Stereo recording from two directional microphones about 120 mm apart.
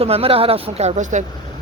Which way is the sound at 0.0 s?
55° right (ahead or behind).